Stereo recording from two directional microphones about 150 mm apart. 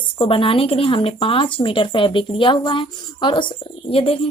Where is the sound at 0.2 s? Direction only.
35° left (ahead or behind).